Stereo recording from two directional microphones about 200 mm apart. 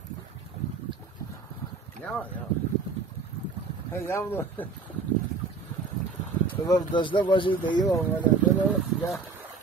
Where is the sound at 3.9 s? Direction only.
10° left (ahead or behind).